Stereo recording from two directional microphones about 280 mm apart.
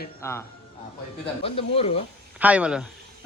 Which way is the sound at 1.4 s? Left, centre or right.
Left.